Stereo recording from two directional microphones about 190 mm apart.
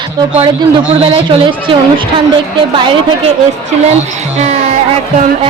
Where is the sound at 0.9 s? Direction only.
30° right (ahead or behind).